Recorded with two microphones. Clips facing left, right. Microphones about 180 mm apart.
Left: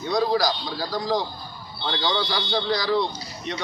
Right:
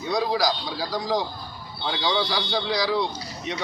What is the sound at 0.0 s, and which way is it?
A man's voice, 10° right (ahead or behind).